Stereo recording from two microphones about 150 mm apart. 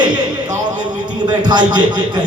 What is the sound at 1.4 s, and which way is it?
Speech, 30° right (ahead or behind).